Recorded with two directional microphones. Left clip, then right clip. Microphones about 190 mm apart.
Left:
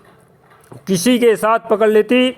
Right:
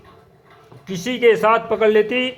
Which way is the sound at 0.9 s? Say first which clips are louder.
Left 3 dB; 35° left (ahead or behind).